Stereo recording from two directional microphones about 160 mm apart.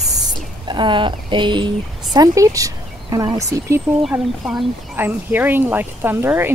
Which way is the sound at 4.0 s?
Centre (ahead or behind).